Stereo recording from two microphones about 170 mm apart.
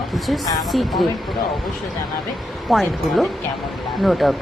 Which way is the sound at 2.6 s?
Centre (ahead or behind).